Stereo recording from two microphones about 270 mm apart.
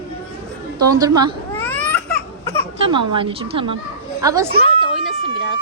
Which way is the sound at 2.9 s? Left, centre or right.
Centre.